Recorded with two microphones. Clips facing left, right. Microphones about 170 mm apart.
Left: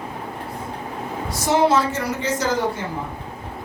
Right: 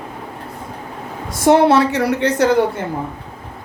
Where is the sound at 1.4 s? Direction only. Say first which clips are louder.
Right 6 dB; 65° right (ahead or behind).